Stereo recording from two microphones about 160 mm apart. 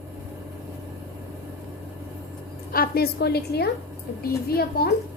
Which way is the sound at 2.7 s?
70° left (ahead or behind).